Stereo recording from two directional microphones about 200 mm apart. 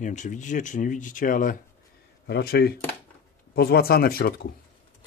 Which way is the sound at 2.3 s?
55° left (ahead or behind).